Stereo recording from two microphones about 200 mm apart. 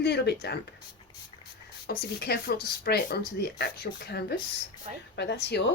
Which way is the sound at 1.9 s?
50° left (ahead or behind).